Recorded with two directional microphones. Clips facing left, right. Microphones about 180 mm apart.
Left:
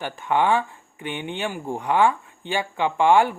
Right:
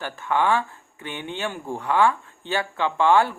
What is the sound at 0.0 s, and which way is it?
Speech, 20° left (ahead or behind).